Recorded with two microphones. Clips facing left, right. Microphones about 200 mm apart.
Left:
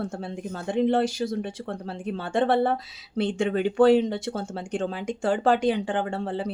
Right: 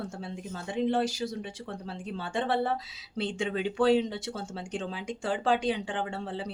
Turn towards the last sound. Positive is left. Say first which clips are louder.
# left 6 dB
turn(degrees=50)  # may be behind; listen again after turning